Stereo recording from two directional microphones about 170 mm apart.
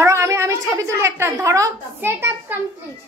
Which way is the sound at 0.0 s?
15° right (ahead or behind).